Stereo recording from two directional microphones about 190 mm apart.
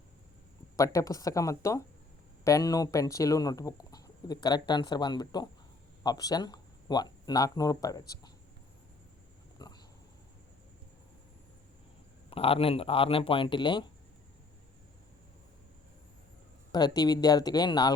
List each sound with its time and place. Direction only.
0.8 s speech: 20° left (ahead or behind)
9.6 s a sound: 20° left (ahead or behind)
12.3 s speech: 30° left (ahead or behind)
16.7 s speech: 20° left (ahead or behind)